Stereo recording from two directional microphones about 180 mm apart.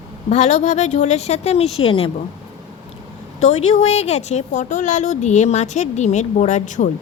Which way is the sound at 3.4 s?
40° left (ahead or behind).